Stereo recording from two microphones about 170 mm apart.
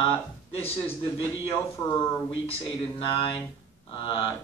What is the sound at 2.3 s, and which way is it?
Speech, 30° left (ahead or behind).